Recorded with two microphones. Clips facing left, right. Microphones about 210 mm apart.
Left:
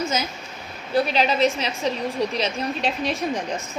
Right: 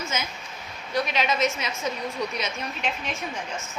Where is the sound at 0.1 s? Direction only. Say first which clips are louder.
Left 5 dB; 35° left (ahead or behind).